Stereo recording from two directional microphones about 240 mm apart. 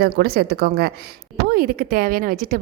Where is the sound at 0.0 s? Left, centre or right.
Right.